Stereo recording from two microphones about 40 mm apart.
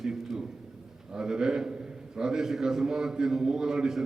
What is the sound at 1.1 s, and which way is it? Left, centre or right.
A man's voice, centre.